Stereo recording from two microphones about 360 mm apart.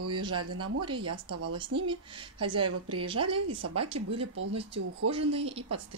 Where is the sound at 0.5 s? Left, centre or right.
Right.